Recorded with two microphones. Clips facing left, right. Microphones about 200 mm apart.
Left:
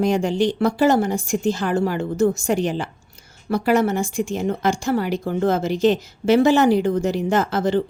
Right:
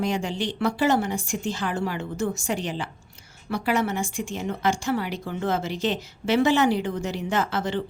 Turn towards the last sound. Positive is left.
turn(degrees=40)  # may be behind; listen again after turning